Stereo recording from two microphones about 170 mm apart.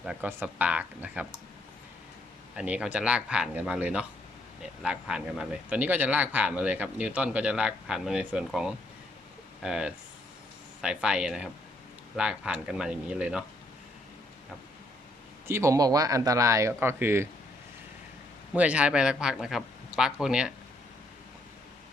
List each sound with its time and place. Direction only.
0.0 s speech: 5° right (ahead or behind)
2.6 s a man's voice: 5° right (ahead or behind)
15.4 s speech: 15° right (ahead or behind)
18.5 s a man's voice: 10° right (ahead or behind)